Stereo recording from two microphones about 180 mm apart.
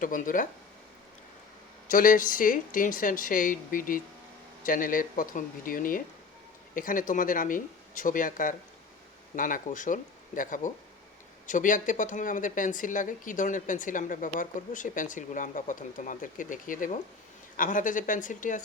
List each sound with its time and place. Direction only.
0.0 s speech: 50° left (ahead or behind)
1.9 s speech: 50° left (ahead or behind)